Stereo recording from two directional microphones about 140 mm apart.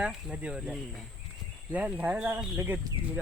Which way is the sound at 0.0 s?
10° right (ahead or behind).